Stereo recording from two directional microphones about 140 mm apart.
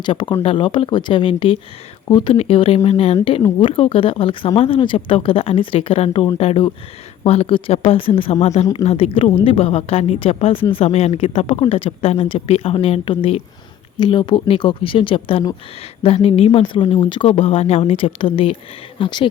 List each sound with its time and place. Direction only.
0.0 s speech: 35° left (ahead or behind)
3.6 s speech: 40° left (ahead or behind)
13.9 s speech: 35° left (ahead or behind)